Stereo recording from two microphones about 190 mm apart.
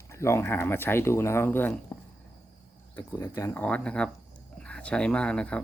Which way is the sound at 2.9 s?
10° left (ahead or behind).